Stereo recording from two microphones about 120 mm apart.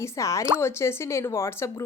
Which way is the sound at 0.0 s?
25° left (ahead or behind).